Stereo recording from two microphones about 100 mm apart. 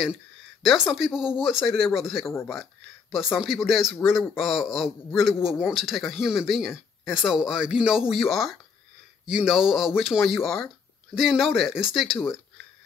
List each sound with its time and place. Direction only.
0.7 s speech: 5° right (ahead or behind)
2.2 s speech: 25° left (ahead or behind)
2.5 s speech: 5° right (ahead or behind)